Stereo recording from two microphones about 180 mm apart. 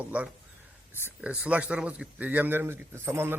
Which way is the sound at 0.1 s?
5° right (ahead or behind).